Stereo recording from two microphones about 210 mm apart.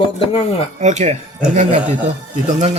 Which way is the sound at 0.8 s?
35° right (ahead or behind).